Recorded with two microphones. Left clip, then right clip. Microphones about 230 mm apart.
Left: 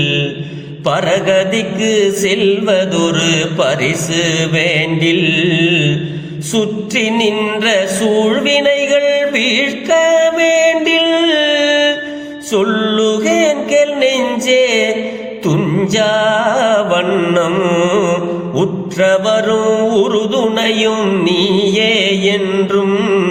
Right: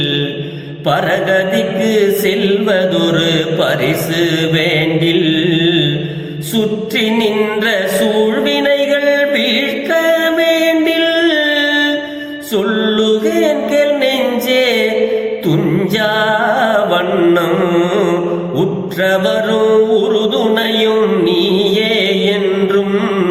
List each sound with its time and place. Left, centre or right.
0.9 s mantra: left
8.4 s mantra: left
12.5 s music: left